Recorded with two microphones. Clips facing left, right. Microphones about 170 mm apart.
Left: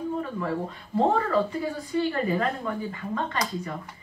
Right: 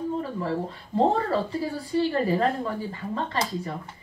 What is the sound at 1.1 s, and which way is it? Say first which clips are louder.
Speech: left 1 dB; 35° right (ahead or behind).